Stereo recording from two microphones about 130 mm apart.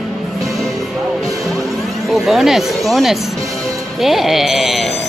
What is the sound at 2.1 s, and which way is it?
Speech, centre (ahead or behind).